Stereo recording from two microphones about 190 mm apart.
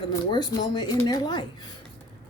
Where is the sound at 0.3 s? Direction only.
20° left (ahead or behind).